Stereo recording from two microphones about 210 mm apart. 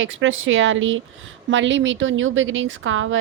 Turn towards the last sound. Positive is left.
turn(degrees=-65)  # may be behind; listen again after turning